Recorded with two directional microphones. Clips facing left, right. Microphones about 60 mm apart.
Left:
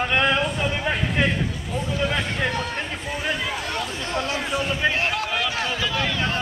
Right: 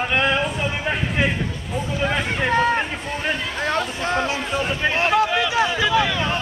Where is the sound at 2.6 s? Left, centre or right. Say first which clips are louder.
Right 9 dB; right.